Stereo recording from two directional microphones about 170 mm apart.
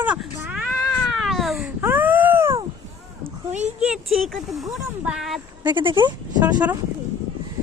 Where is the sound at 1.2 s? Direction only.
Centre (ahead or behind).